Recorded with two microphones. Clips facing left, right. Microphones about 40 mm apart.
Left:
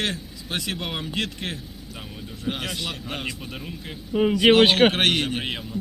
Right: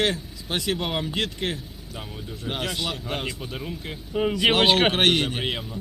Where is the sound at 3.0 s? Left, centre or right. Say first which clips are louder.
Right 1 dB; centre.